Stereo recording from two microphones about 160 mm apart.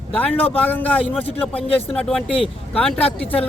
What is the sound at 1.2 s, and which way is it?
Speech, 40° left (ahead or behind).